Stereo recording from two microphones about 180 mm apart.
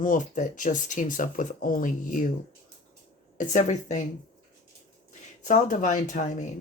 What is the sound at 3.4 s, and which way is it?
Speech, 40° left (ahead or behind).